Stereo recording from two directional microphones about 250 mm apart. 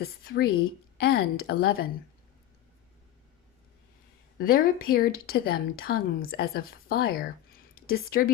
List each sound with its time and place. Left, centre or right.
0.0 s speech: left
4.4 s speech: left